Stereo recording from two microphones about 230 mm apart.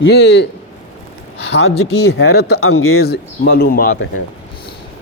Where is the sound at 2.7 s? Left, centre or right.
Left.